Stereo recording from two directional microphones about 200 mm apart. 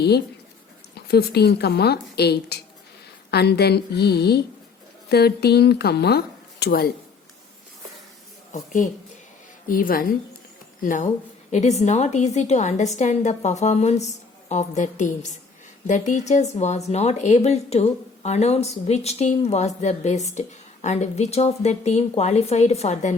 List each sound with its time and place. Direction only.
0.9 s a woman's voice: 55° left (ahead or behind)
8.5 s a woman's voice: 40° left (ahead or behind)